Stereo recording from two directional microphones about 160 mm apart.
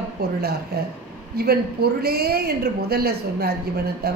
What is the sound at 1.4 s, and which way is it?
A woman's voice, 80° right.